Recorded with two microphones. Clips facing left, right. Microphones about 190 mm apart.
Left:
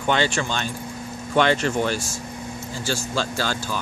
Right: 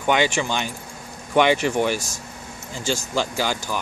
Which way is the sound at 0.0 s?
15° right (ahead or behind).